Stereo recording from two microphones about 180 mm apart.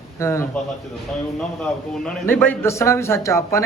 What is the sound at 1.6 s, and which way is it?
Speech, 5° left (ahead or behind).